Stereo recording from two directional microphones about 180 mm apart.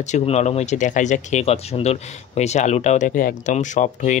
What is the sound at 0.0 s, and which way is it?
Speech, 40° left (ahead or behind).